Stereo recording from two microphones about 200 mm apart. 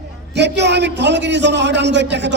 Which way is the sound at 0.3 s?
60° right (ahead or behind).